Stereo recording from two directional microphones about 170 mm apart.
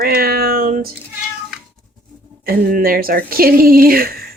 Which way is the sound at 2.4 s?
60° right (ahead or behind).